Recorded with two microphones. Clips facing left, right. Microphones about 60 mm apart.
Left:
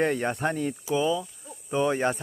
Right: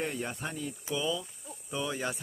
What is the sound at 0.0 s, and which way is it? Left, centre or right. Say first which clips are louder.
Speech: left 10 dB; left.